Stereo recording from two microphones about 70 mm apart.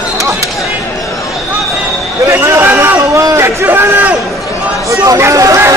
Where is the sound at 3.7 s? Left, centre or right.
Right.